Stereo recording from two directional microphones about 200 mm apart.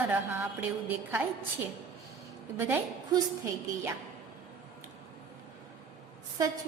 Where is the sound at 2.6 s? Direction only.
10° right (ahead or behind).